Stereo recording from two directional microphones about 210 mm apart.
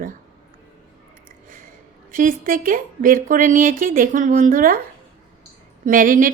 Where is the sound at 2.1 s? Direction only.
40° right (ahead or behind).